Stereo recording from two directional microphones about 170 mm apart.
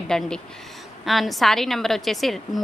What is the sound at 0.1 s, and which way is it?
A woman's voice, 5° left (ahead or behind).